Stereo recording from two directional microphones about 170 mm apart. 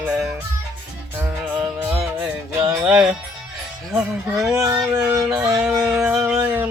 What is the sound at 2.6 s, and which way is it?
Music, 10° right (ahead or behind).